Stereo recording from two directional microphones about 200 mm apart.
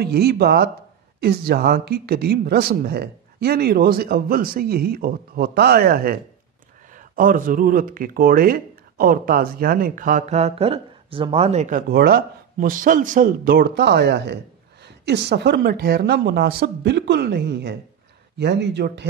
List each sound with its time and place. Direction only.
0.0 s speech: 50° right (ahead or behind); by 11.8 s 35° right (ahead or behind)
11.9 s speech: 50° right (ahead or behind)